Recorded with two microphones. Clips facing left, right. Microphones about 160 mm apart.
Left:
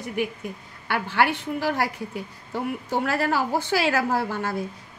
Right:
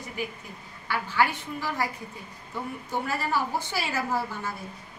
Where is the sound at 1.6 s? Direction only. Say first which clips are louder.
Left 5 dB; 75° left (ahead or behind).